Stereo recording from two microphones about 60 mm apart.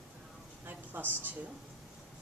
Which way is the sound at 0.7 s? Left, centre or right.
Right.